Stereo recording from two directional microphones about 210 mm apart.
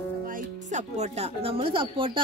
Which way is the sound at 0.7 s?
35° right (ahead or behind).